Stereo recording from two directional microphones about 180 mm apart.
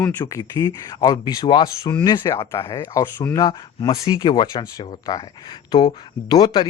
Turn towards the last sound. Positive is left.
turn(degrees=25)  # may be behind; listen again after turning